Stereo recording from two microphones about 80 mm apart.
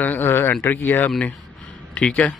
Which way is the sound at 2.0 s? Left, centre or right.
Centre.